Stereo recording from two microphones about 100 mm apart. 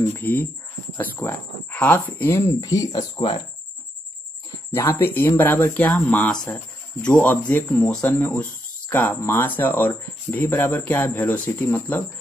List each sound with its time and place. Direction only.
0.1 s speech: 20° left (ahead or behind)
2.6 s speech: 35° left (ahead or behind)
3.0 s speech: 60° left (ahead or behind)
4.7 s speech: 25° left (ahead or behind)